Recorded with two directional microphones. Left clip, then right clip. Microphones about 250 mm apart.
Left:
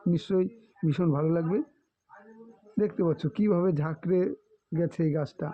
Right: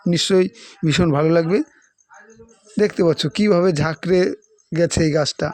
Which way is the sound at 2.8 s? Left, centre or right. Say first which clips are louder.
Right 11 dB; right.